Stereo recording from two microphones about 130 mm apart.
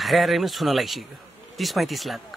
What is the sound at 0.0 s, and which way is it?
Speech, centre (ahead or behind).